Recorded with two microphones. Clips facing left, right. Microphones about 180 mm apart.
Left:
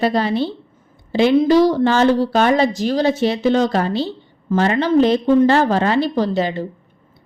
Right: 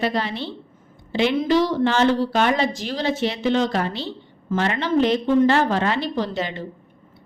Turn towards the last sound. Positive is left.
turn(degrees=35)  # may be behind; listen again after turning